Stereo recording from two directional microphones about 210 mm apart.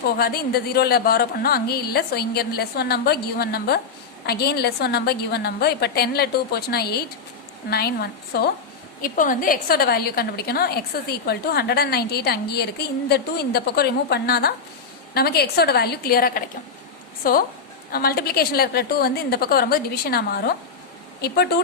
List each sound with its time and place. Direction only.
0.2 s speech: 45° left (ahead or behind)